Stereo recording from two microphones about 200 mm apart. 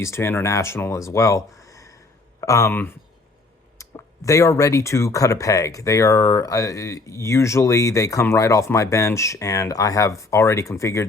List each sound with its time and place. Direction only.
0.0 s speech: 10° left (ahead or behind)